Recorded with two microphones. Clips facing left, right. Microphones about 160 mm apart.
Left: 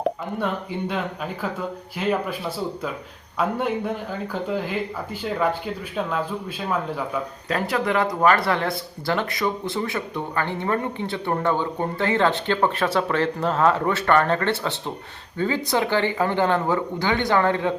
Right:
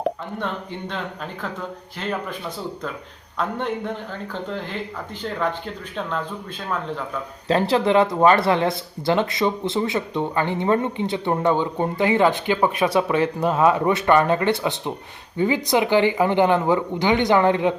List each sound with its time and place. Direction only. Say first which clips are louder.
0.0 s speech: left 1 dB; 10° left (ahead or behind)
3.3 s speech: left 2 dB; 10° left (ahead or behind)
7.4 s speech: right 6 dB; 30° right (ahead or behind)